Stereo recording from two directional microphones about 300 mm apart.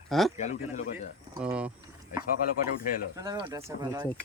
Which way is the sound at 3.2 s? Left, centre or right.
Centre.